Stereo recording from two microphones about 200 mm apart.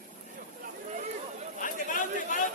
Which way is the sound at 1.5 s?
40° left (ahead or behind).